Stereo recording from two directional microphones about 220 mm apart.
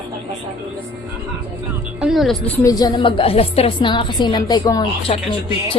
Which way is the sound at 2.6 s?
15° left (ahead or behind).